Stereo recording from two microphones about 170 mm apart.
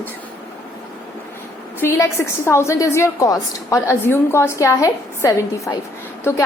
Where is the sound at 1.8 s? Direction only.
15° left (ahead or behind).